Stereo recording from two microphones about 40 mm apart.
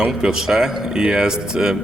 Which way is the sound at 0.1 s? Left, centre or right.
Centre.